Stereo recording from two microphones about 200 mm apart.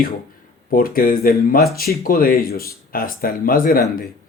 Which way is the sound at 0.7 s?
45° left (ahead or behind).